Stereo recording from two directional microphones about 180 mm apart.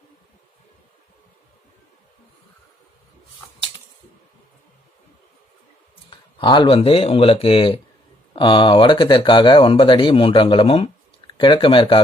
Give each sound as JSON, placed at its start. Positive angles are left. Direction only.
{"t": 6.4, "sound": "speech", "side_deg": 25}